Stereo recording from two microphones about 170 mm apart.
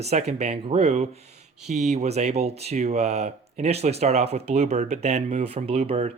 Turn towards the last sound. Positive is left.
turn(degrees=-40)  # may be behind; listen again after turning